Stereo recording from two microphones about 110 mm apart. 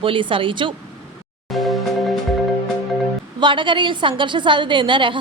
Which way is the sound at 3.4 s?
45° right (ahead or behind).